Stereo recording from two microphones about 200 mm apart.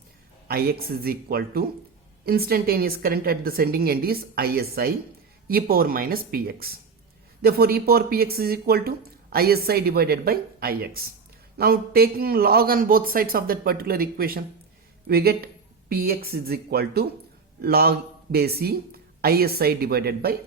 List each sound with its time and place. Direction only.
0.4 s speech: 50° right (ahead or behind)